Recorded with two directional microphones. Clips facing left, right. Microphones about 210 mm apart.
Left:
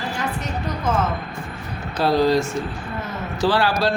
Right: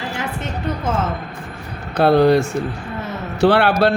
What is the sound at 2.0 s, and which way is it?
Speech, 60° right (ahead or behind).